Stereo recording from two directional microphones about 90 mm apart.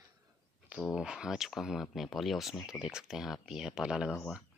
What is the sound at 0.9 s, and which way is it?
Speech, 10° right (ahead or behind).